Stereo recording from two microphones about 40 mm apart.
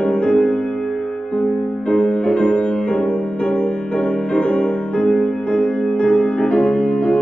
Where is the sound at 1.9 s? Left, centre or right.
Left.